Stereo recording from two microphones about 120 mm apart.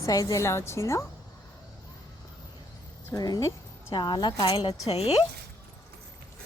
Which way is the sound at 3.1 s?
30° left (ahead or behind).